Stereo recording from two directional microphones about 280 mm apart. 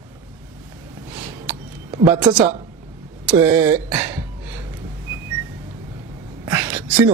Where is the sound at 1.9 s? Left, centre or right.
Centre.